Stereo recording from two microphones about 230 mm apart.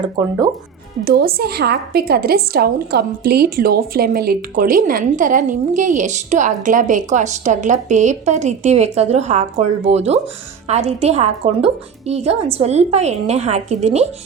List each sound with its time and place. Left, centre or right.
0.0 s speech: centre
1.0 s a woman's voice: right